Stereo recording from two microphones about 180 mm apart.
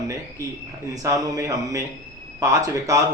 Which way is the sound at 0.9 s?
20° right (ahead or behind).